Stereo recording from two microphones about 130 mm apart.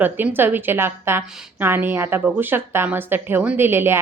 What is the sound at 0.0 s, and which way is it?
A woman's voice, 15° right (ahead or behind).